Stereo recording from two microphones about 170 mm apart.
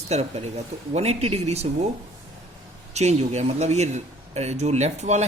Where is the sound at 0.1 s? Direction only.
40° right (ahead or behind).